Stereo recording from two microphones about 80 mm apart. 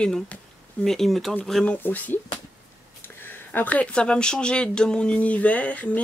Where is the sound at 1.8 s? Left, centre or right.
Left.